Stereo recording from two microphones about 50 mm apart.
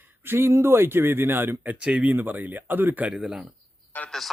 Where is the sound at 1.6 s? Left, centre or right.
Right.